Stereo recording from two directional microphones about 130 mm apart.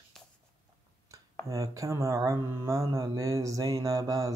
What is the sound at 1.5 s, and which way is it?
Speech, 25° right (ahead or behind).